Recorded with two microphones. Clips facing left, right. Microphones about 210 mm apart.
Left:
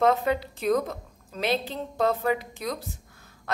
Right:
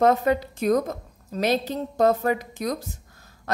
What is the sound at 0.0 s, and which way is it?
A woman's voice, 45° right (ahead or behind).